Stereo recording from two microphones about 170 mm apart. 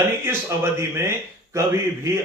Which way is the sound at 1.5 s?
15° right (ahead or behind).